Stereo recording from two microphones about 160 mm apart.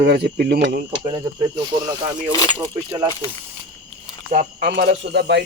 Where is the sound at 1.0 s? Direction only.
25° right (ahead or behind).